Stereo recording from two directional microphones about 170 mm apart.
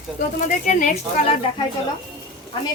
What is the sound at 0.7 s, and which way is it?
Speech, 50° left (ahead or behind).